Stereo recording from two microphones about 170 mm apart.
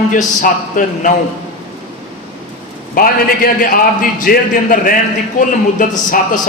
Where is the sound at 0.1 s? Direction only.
50° left (ahead or behind).